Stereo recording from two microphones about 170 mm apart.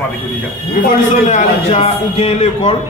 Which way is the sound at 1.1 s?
40° left (ahead or behind).